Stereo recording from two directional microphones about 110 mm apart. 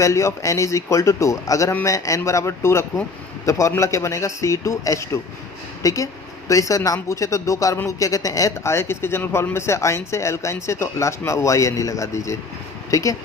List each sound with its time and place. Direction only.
0.0 s a man's voice: 30° left (ahead or behind)